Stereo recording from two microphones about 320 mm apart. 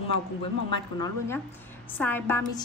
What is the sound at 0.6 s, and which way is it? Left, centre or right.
A woman's voice, centre.